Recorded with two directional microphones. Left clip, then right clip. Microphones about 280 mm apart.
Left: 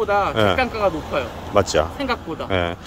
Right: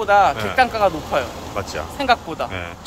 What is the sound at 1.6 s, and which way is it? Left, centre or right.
Speech, left.